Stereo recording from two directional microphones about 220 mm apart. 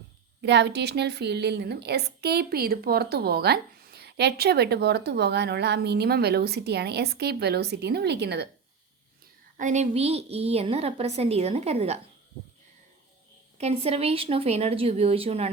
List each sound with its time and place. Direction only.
0.4 s a woman's voice: 50° right (ahead or behind)
9.6 s a woman's voice: 35° right (ahead or behind)
13.6 s a woman's voice: 30° right (ahead or behind)